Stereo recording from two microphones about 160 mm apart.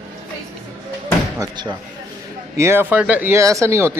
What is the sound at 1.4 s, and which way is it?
Speech, 25° right (ahead or behind).